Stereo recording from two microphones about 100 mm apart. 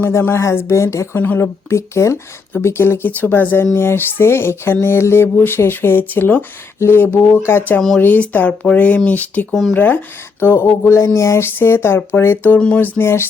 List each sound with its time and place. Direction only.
0.0 s a sound: 25° left (ahead or behind)
7.8 s speech: 5° left (ahead or behind)
8.0 s speech: 15° left (ahead or behind)
9.5 s speech: centre (ahead or behind)
9.7 s speech: 15° left (ahead or behind)
10.4 s a sound: 25° left (ahead or behind)